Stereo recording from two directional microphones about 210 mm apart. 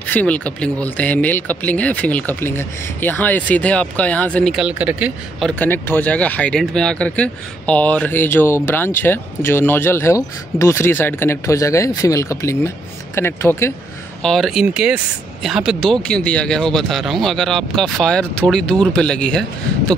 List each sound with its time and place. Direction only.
0.0 s speech: 10° left (ahead or behind)
5.6 s speech: 10° left (ahead or behind)
14.2 s speech: centre (ahead or behind)